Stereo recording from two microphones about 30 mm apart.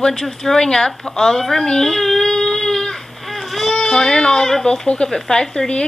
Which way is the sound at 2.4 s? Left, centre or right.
Centre.